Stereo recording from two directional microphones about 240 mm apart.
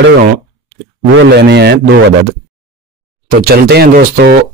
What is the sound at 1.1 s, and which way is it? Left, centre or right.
Speech, right.